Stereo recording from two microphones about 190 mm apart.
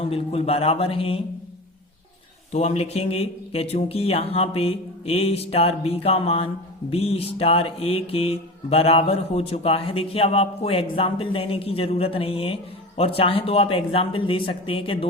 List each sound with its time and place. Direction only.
0.0 s mantra: 30° left (ahead or behind)
2.5 s mantra: 35° left (ahead or behind)
13.0 s speech: 30° left (ahead or behind)